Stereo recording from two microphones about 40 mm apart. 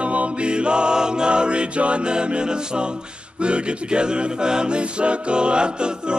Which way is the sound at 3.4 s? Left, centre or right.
Right.